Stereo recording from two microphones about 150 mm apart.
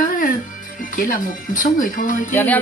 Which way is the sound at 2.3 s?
10° left (ahead or behind).